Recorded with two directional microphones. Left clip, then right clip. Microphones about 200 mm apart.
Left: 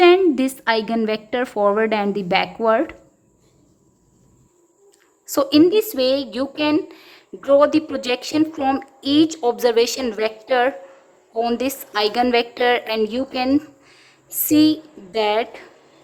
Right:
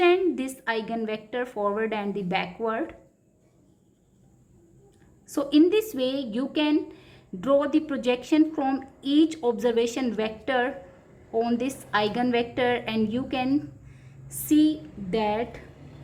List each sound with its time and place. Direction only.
0.0 s a woman's voice: 30° left (ahead or behind)
5.3 s speech: 30° left (ahead or behind)